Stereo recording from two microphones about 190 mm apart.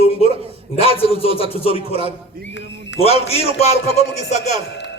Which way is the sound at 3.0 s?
30° left (ahead or behind).